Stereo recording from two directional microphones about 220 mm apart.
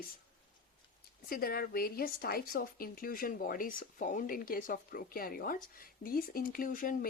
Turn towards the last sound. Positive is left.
turn(degrees=40)  # may be behind; listen again after turning